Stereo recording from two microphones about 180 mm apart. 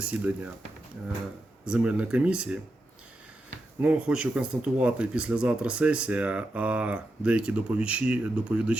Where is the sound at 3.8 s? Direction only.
5° right (ahead or behind).